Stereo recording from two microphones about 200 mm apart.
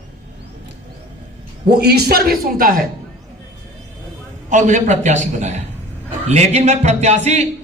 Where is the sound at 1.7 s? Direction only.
55° right (ahead or behind).